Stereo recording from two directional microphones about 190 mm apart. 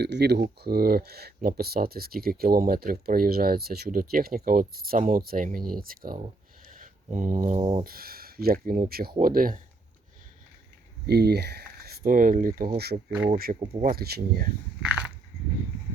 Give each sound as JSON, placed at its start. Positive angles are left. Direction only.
{"t": 0.0, "sound": "speech", "side_deg": -60}
{"t": 7.9, "sound": "speech", "side_deg": -50}
{"t": 11.0, "sound": "speech", "side_deg": -60}
{"t": 13.1, "sound": "speech", "side_deg": -10}
{"t": 13.3, "sound": "speech", "side_deg": -50}
{"t": 14.8, "sound": "biting", "side_deg": -5}